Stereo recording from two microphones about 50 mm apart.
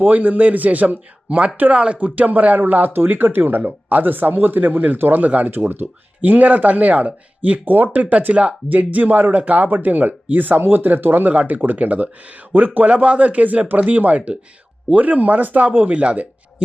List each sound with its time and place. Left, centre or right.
0.0 s speech: right
3.6 s speech: right